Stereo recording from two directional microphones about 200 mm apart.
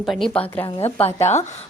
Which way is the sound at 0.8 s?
30° left (ahead or behind).